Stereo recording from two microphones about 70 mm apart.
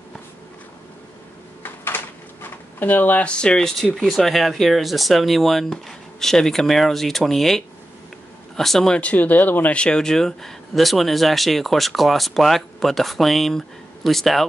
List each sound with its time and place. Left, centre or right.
2.8 s speech: left; by 8.9 s centre
8.9 s speech: left; by 14.5 s centre